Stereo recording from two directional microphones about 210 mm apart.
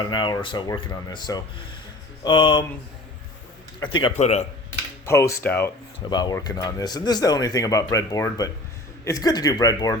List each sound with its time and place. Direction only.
0.0 s speech: 20° left (ahead or behind)
3.8 s speech: 25° left (ahead or behind)
5.0 s speech: 15° left (ahead or behind)
6.1 s speech: 20° left (ahead or behind)